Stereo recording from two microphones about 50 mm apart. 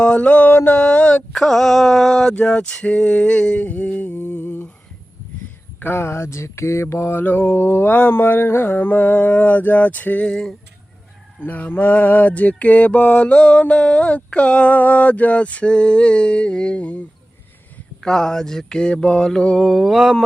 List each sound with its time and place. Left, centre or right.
0.0 s mantra: left
0.4 s a sound: left
1.3 s mantra: centre; by 4.7 s left
5.8 s speech: left
6.8 s mantra: left
7.2 s mantra: left
10.2 s mantra: centre
11.4 s mantra: left
18.0 s mantra: centre
19.6 s mantra: centre